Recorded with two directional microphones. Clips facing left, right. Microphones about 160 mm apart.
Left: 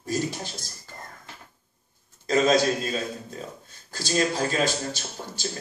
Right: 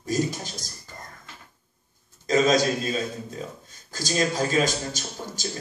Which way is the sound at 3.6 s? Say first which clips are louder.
Left 2 dB; 45° right (ahead or behind).